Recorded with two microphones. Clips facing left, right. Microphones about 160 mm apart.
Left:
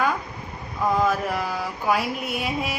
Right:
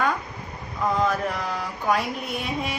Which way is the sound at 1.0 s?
5° left (ahead or behind).